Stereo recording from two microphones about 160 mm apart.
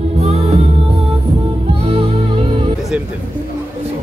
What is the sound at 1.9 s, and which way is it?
Music, 35° right (ahead or behind).